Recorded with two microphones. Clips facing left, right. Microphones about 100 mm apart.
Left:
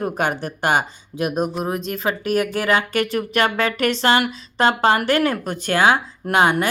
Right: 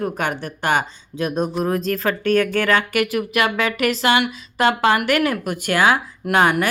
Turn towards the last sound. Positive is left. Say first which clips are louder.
# even
turn(degrees=25)  # may be behind; listen again after turning